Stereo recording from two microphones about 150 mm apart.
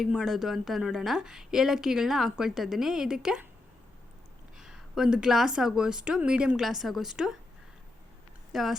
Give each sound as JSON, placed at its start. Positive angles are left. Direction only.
{"t": 0.0, "sound": "speech", "side_deg": 0}
{"t": 4.5, "sound": "speech", "side_deg": -5}
{"t": 8.5, "sound": "speech", "side_deg": 0}